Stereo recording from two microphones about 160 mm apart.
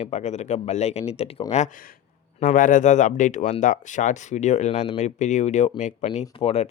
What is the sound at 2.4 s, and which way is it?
Speech, 55° left (ahead or behind).